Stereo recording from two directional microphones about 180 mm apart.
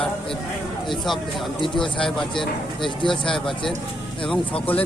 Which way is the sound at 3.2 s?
5° left (ahead or behind).